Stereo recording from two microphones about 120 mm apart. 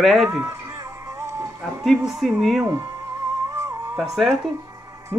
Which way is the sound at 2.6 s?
25° right (ahead or behind).